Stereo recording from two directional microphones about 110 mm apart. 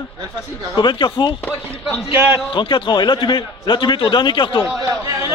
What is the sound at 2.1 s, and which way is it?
Speech, 15° right (ahead or behind).